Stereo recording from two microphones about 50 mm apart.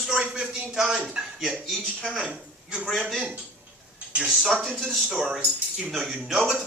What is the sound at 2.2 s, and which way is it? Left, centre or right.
Speech, centre.